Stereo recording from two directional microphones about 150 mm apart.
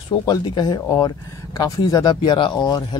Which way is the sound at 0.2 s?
25° left (ahead or behind).